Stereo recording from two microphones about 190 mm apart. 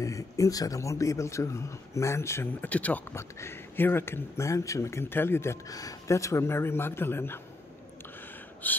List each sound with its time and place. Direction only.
0.0 s speech: 15° left (ahead or behind)
8.6 s speech: 10° left (ahead or behind)